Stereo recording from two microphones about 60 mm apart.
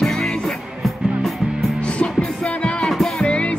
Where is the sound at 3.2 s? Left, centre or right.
Centre.